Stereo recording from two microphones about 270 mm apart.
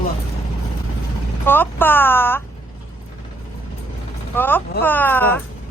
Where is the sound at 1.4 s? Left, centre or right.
Centre.